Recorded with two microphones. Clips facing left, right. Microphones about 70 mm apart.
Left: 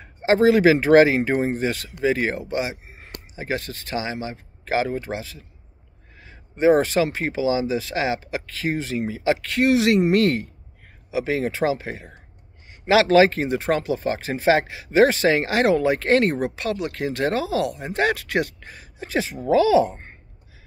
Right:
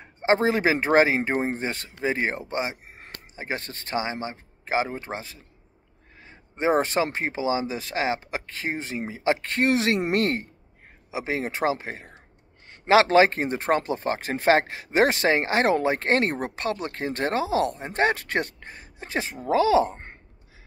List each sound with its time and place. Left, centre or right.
0.0 s speech: right
5.0 s speech: right
6.5 s speech: right